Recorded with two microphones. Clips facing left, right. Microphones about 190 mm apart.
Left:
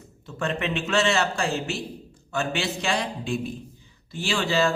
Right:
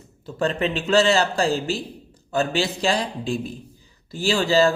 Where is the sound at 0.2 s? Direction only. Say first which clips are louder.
Right 5 dB; 35° right (ahead or behind).